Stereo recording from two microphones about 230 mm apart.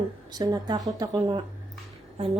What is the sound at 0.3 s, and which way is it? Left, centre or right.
Speech, centre.